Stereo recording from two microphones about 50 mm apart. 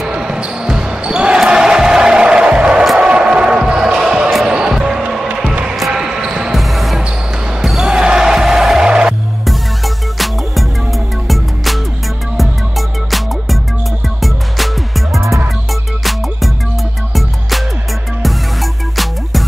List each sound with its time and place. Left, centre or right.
0.1 s basketball bounce: centre
1.4 s music: centre
4.7 s basketball bounce: centre
5.4 s music: centre
5.9 s basketball bounce: centre
6.5 s basketball bounce: centre
8.8 s music: centre
10.1 s music: centre
18.2 s music: centre